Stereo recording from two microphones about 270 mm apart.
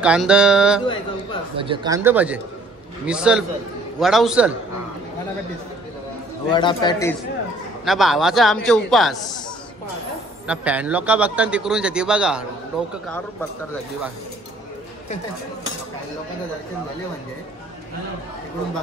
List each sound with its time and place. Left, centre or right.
0.0 s a man's voice: centre
1.6 s a man's voice: centre
6.5 s a man's voice: centre
7.8 s a man's voice: centre
10.4 s a man's voice: centre